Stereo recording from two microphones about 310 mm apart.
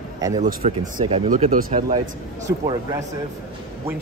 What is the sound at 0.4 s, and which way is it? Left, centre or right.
Speech, right.